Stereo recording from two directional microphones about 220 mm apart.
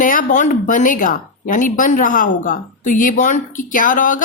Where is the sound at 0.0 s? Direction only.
40° left (ahead or behind).